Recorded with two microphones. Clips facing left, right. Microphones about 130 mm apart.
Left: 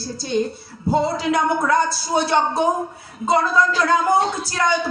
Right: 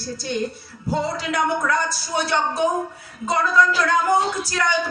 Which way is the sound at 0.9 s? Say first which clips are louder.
Left 4 dB; 25° left (ahead or behind).